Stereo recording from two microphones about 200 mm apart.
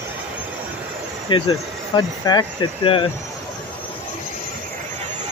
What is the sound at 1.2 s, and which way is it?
Speech, 25° left (ahead or behind).